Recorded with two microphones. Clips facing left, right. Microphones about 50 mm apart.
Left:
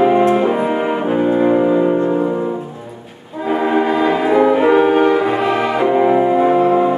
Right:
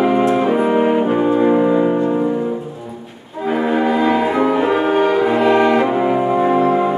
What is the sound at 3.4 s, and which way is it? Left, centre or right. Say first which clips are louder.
Brass instrument: left 1 dB; centre.